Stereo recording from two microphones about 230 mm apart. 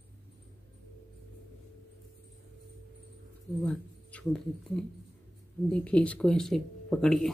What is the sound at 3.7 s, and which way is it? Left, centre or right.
Speech, centre.